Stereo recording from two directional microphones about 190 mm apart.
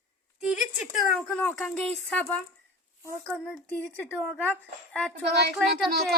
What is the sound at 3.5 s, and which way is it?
Speech, 5° left (ahead or behind).